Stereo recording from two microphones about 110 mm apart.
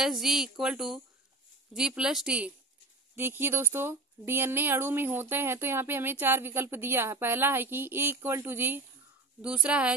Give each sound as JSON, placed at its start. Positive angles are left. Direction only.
{"t": 0.0, "sound": "speech", "side_deg": -5}
{"t": 3.2, "sound": "a woman's voice", "side_deg": -20}